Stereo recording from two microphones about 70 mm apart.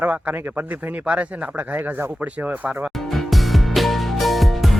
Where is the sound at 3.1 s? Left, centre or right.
Centre.